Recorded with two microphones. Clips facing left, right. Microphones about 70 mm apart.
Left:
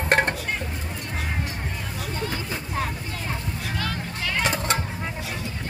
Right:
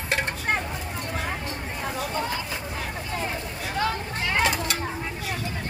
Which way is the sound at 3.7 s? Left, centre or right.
Right.